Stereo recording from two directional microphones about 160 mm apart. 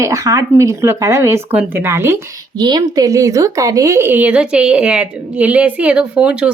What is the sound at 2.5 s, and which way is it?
Speech, 25° right (ahead or behind).